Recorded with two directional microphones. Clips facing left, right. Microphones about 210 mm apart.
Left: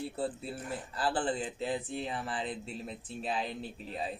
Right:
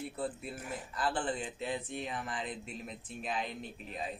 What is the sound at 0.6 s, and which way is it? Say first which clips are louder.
Speech: left 3 dB; 10° right (ahead or behind).